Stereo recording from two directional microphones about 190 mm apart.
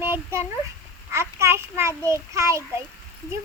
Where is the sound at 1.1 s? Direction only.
15° right (ahead or behind).